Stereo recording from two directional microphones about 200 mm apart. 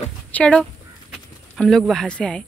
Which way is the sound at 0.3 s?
5° left (ahead or behind).